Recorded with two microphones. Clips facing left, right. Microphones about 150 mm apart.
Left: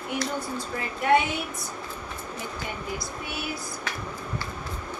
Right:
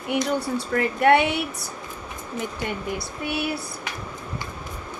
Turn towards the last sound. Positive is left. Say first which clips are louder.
# right 6 dB
turn(degrees=-65)  # may be behind; listen again after turning